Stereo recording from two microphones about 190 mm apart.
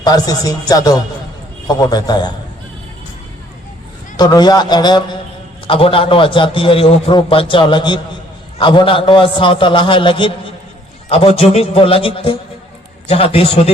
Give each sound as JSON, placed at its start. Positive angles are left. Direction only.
{"t": 0.0, "sound": "a man's voice", "side_deg": 20}
{"t": 4.2, "sound": "a man's voice", "side_deg": 20}